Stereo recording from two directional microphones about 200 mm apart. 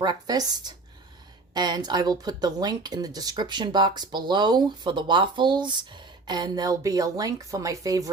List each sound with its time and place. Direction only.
0.0 s speech: 20° right (ahead or behind)